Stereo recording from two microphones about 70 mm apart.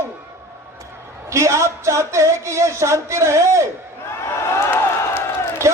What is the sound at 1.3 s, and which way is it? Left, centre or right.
A man's voice, right.